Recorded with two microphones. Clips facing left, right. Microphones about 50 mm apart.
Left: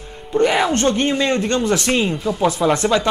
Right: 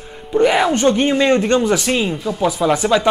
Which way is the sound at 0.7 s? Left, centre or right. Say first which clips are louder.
Right 3 dB; centre.